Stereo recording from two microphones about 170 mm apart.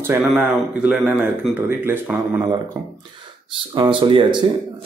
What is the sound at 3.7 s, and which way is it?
Speech, 25° right (ahead or behind).